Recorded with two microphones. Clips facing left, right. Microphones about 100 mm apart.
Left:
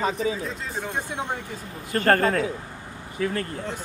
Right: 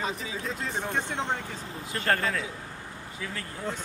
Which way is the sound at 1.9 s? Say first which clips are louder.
Left 8 dB; 50° left (ahead or behind).